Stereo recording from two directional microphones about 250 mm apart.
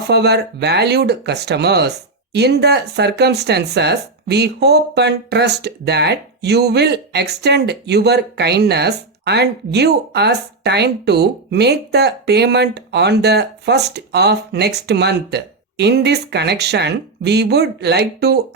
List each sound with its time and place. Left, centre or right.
0.1 s speech: right